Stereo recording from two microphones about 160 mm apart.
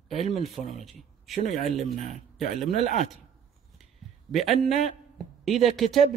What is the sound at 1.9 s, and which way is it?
Speech, 45° right (ahead or behind).